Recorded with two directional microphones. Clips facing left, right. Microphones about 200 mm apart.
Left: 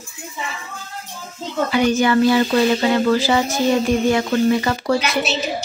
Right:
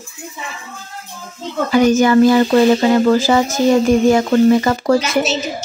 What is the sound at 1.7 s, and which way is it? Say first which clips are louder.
Speech: right 5 dB; 45° right (ahead or behind).